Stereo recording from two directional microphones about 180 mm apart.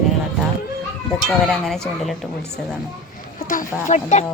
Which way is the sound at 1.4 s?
Centre (ahead or behind).